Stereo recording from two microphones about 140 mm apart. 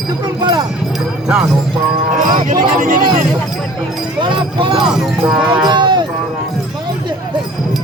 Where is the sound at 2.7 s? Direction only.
80° right.